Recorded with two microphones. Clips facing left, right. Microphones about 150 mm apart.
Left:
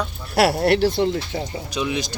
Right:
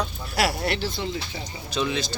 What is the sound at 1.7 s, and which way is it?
Speech, 15° left (ahead or behind).